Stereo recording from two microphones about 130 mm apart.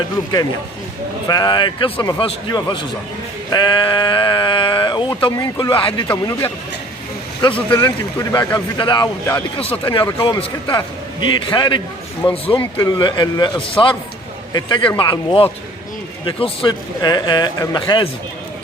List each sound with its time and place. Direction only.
1.3 s a man's voice: 30° left (ahead or behind)
7.7 s a man's voice: 30° left (ahead or behind)
12.8 s a man's voice: 30° left (ahead or behind)